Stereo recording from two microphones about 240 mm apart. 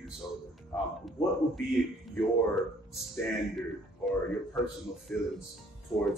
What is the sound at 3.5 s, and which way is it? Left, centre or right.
A man's voice, centre.